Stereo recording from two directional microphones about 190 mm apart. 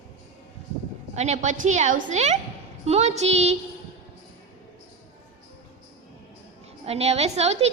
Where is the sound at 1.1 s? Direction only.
35° right (ahead or behind).